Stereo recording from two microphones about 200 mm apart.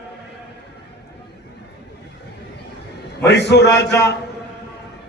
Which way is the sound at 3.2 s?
60° left (ahead or behind).